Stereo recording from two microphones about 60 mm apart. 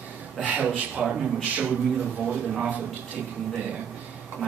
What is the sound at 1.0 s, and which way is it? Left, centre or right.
A man's voice, centre.